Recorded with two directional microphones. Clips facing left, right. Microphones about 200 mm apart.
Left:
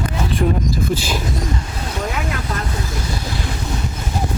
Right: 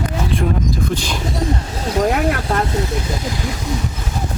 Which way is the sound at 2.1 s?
55° right (ahead or behind).